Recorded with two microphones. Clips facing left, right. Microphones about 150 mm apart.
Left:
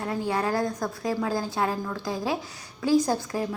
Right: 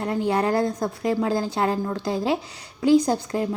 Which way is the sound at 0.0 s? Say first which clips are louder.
Right 4 dB; 25° right (ahead or behind).